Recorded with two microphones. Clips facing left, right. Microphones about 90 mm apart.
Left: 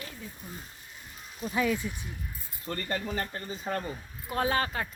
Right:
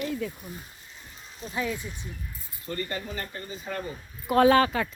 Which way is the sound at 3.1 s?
40° left (ahead or behind).